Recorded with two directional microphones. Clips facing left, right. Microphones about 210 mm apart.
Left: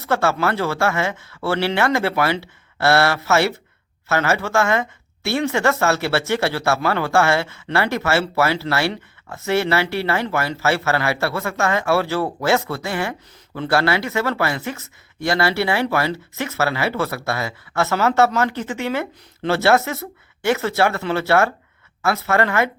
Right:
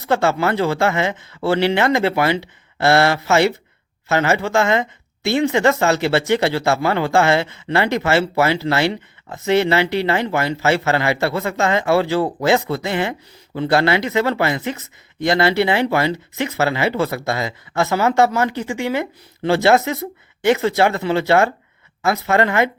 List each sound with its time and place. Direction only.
0.0 s speech: 15° right (ahead or behind)